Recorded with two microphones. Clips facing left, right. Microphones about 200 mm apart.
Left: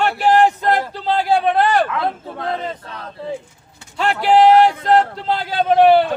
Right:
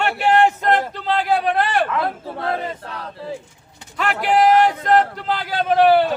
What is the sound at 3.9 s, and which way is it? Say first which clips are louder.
Speech: left 4 dB; 30° left (ahead or behind).